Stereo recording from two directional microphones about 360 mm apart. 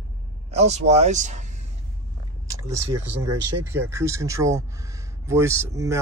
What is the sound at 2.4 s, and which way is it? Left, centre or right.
Speech, centre.